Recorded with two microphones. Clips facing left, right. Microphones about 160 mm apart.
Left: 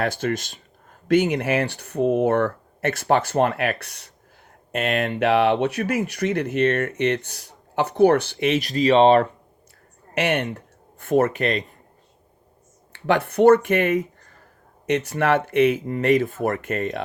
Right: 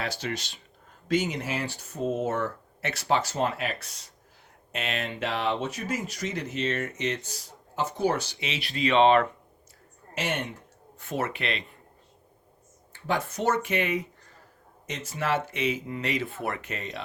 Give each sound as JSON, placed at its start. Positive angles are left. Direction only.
{"t": 0.0, "sound": "speech", "side_deg": 50}
{"t": 4.7, "sound": "speech", "side_deg": 55}
{"t": 10.2, "sound": "speech", "side_deg": 65}
{"t": 10.9, "sound": "speech", "side_deg": 50}
{"t": 12.9, "sound": "speech", "side_deg": 70}
{"t": 14.8, "sound": "speech", "side_deg": 65}